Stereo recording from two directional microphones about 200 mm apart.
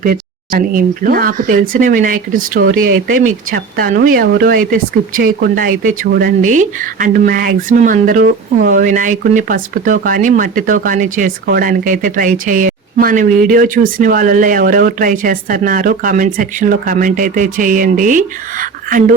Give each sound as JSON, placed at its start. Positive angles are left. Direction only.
{"t": 0.0, "sound": "speech", "side_deg": -45}